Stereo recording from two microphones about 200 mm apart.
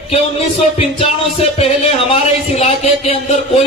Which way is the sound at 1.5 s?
30° left (ahead or behind).